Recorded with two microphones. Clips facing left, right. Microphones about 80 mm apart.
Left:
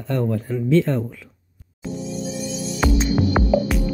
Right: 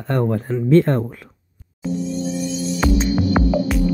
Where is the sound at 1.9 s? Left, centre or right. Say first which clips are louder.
Right 5 dB; centre.